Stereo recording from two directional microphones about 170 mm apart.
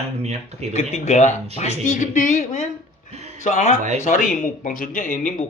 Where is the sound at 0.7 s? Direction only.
40° left (ahead or behind).